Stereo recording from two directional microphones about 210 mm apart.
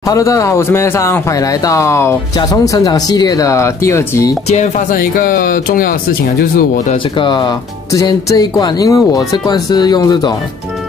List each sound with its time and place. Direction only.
0.0 s speech: 15° left (ahead or behind)
4.5 s speech: 35° left (ahead or behind)
6.9 s speech: 25° left (ahead or behind)